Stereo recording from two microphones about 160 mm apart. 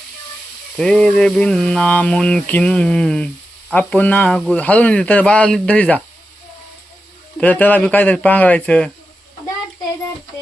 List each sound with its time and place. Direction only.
0.8 s a sound: 5° left (ahead or behind)
3.7 s speech: 10° left (ahead or behind)
7.3 s speech: 10° left (ahead or behind)